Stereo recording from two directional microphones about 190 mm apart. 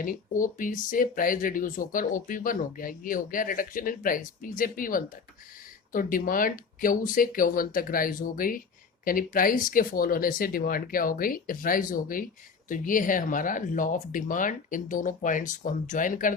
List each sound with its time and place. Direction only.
0.0 s speech: 45° left (ahead or behind)